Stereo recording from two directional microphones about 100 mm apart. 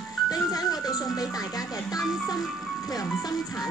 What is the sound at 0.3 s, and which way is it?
Music, 40° left (ahead or behind).